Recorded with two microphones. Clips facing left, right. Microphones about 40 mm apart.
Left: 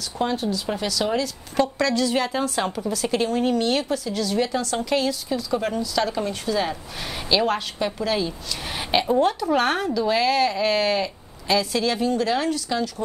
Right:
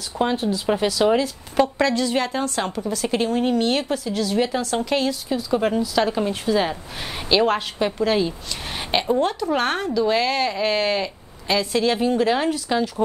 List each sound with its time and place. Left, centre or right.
0.2 s a woman's voice: right